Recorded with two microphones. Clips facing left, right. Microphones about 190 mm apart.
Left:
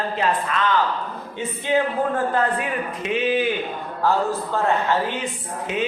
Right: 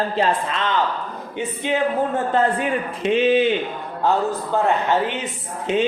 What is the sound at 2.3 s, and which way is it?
A man's voice, 30° right (ahead or behind).